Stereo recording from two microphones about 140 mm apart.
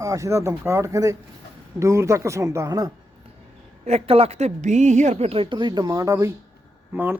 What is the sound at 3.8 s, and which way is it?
A woman's voice, 45° right (ahead or behind).